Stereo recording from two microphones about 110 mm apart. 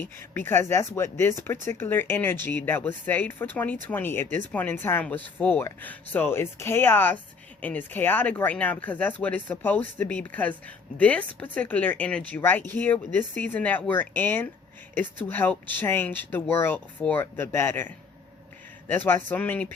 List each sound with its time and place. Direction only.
0.0 s speech: 20° left (ahead or behind)